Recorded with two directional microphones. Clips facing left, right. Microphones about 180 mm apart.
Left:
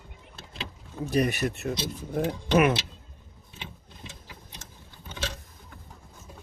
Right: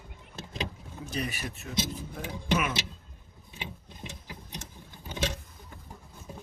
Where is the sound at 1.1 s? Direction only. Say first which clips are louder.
Left 10 dB; 65° left (ahead or behind).